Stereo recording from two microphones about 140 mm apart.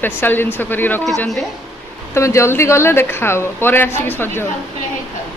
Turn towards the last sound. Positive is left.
turn(degrees=15)  # may be behind; listen again after turning